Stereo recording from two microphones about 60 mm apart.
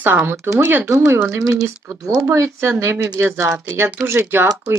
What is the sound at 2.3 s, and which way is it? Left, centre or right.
Speech, right.